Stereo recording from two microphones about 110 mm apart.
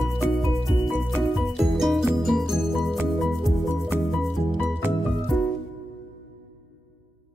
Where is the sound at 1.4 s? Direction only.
Centre (ahead or behind).